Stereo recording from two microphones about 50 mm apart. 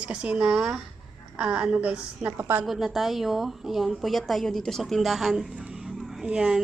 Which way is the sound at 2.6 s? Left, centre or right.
Centre.